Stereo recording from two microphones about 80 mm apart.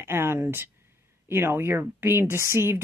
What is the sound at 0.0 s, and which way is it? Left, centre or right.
A woman's voice, right.